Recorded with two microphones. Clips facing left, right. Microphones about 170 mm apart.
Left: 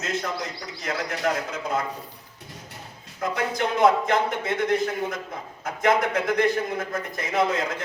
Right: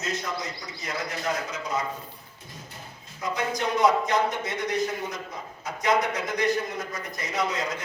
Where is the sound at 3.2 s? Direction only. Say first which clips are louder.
Left 2 dB; 55° left (ahead or behind).